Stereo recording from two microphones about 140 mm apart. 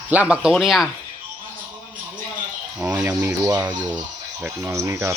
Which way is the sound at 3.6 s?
30° right (ahead or behind).